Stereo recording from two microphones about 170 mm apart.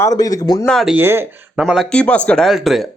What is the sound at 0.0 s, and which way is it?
Speech, 20° left (ahead or behind).